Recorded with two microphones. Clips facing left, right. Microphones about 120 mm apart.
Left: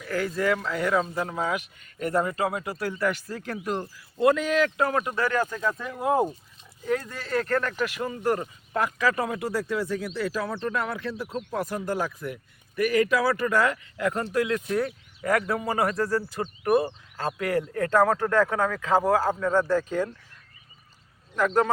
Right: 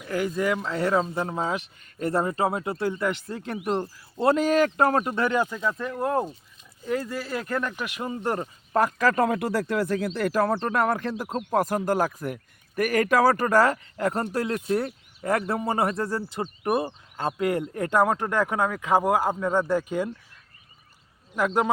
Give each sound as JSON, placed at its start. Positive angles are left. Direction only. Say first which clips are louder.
{"t": 0.0, "sound": "speech", "louder": "right 1 dB", "side_deg": -20}
{"t": 6.8, "sound": "speech", "louder": "even", "side_deg": -5}
{"t": 8.7, "sound": "speech", "louder": "right 3 dB", "side_deg": -45}
{"t": 10.5, "sound": "speech", "louder": "right 5 dB", "side_deg": -40}
{"t": 21.3, "sound": "speech", "louder": "left 1 dB", "side_deg": -10}